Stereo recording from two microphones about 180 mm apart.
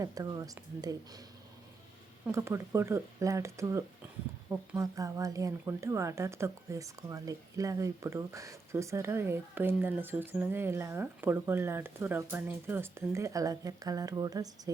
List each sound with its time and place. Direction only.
0.0 s speech: 20° right (ahead or behind)
2.2 s speech: 15° right (ahead or behind)